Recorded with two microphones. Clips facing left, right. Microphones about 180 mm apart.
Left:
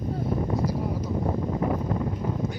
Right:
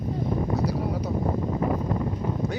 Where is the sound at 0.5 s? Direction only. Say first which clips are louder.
Right 1 dB; 70° right (ahead or behind).